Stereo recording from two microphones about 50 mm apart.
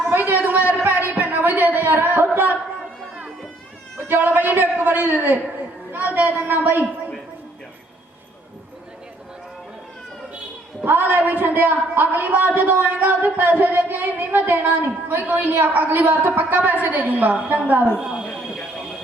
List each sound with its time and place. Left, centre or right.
0.1 s a sound: right
3.9 s cat: right
4.3 s a man's voice: right
10.8 s a man's voice: right